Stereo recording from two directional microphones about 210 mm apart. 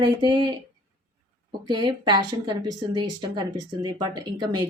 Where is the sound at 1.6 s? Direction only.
20° right (ahead or behind).